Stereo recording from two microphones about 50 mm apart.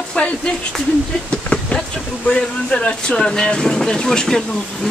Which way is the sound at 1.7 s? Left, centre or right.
Left.